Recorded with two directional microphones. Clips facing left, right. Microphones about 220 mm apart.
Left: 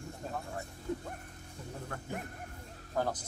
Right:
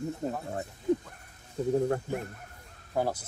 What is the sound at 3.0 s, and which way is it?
Speech, 10° right (ahead or behind).